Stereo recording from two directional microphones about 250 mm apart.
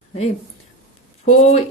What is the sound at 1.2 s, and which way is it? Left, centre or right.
Speech, left.